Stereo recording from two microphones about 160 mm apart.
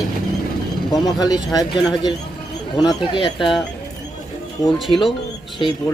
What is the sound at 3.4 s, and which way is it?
Speech, centre (ahead or behind).